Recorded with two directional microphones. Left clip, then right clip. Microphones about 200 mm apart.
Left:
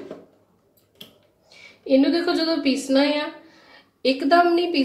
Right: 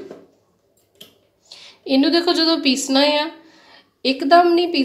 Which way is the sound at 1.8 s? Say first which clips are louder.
Right 2 dB; 50° right (ahead or behind).